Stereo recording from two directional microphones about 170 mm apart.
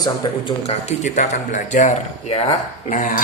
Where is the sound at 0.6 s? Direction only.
40° left (ahead or behind).